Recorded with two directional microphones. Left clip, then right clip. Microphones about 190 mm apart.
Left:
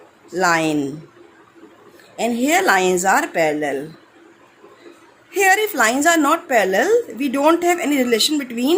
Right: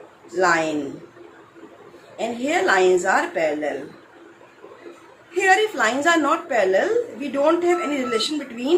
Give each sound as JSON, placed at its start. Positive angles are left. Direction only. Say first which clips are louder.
{"t": 0.3, "sound": "a woman's voice", "louder": "left 2 dB", "side_deg": 65}
{"t": 2.1, "sound": "speech", "louder": "left 5 dB", "side_deg": 65}
{"t": 5.3, "sound": "a woman's voice", "louder": "left 2 dB", "side_deg": 65}